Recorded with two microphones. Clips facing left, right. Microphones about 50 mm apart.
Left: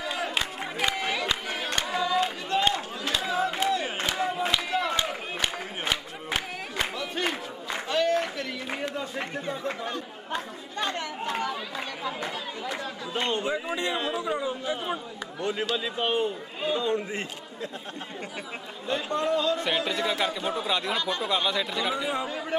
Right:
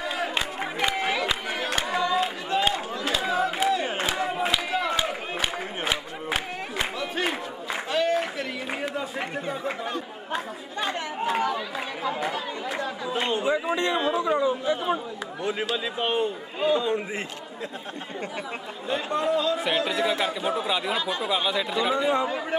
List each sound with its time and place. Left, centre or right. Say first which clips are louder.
0.0 s crowd: right 2 dB; centre
9.5 s chatter: right 2 dB; centre
13.9 s a sound: right 5 dB; centre
15.4 s a man's voice: right 1 dB; centre
18.9 s a man's voice: right 1 dB; centre